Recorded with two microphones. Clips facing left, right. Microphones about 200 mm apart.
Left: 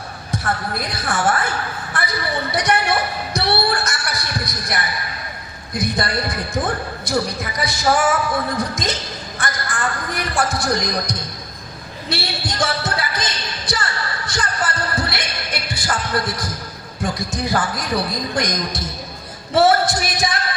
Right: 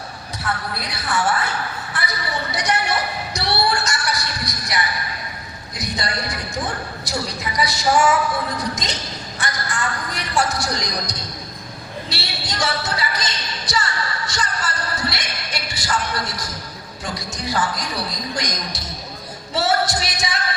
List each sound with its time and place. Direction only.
0.3 s a woman's voice: 50° left (ahead or behind)
1.9 s a sound: 50° left (ahead or behind)
3.3 s music: 55° left (ahead or behind)
5.7 s speech: 55° left (ahead or behind)
9.4 s a sound: 55° left (ahead or behind)
19.5 s speech: 55° left (ahead or behind)